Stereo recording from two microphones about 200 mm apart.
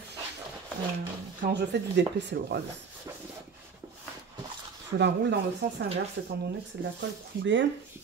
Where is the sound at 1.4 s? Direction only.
55° right (ahead or behind).